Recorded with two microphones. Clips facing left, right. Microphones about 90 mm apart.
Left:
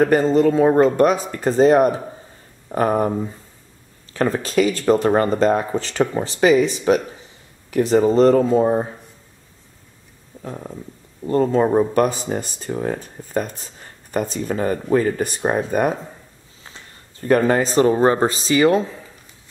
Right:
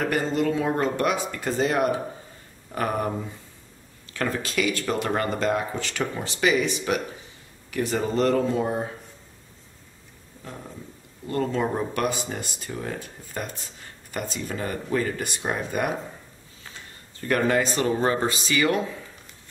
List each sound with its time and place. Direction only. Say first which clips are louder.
0.0 s speech: left 9 dB; 40° left (ahead or behind)
4.1 s speech: left 8 dB; 35° left (ahead or behind)
11.2 s speech: left 8 dB; 35° left (ahead or behind)
17.3 s speech: left 6 dB; 35° left (ahead or behind)